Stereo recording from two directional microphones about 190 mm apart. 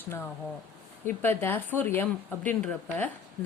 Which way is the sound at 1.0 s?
10° left (ahead or behind).